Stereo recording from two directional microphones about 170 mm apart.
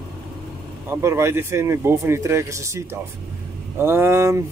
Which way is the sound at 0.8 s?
15° right (ahead or behind).